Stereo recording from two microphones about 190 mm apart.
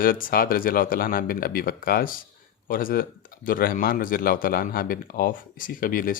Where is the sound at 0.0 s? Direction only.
50° left (ahead or behind).